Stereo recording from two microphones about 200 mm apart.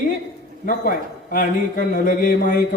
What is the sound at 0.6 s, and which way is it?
A man's voice, 45° left (ahead or behind).